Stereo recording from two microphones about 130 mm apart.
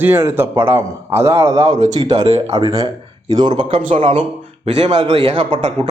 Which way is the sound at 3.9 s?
50° right (ahead or behind).